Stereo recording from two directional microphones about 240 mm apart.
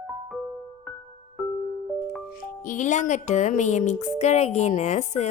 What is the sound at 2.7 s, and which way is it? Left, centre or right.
Speech, left.